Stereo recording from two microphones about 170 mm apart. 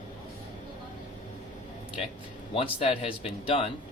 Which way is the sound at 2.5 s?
30° left (ahead or behind).